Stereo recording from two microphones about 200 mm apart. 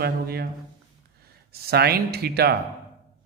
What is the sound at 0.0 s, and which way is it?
Speech, 50° right (ahead or behind).